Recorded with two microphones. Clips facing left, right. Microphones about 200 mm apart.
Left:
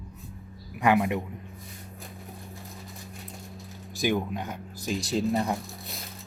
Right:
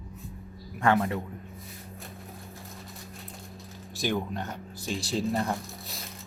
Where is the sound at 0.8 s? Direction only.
15° left (ahead or behind).